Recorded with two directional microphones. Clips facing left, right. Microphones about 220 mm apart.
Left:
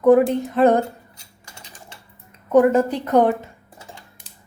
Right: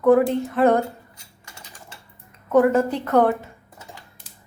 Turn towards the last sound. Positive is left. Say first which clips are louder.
# left 1 dB
turn(degrees=20)  # may be behind; listen again after turning